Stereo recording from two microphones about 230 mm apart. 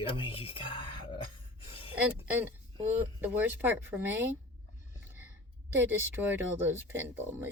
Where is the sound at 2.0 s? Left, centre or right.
Centre.